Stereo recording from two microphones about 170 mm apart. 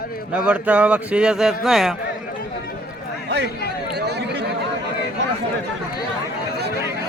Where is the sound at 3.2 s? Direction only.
75° right (ahead or behind).